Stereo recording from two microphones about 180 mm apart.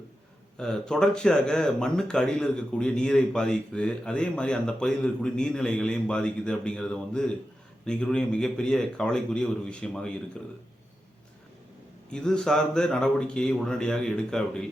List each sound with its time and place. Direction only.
0.5 s speech: 5° left (ahead or behind)
12.1 s speech: 5° left (ahead or behind)